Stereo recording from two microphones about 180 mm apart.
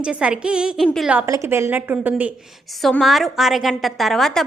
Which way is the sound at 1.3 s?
15° right (ahead or behind).